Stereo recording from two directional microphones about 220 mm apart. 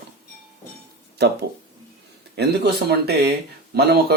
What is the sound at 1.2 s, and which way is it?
Speech, 50° right (ahead or behind).